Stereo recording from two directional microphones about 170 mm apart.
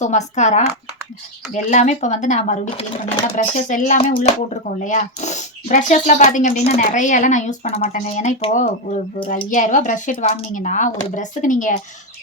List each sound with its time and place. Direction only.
0.0 s speech: 45° left (ahead or behind)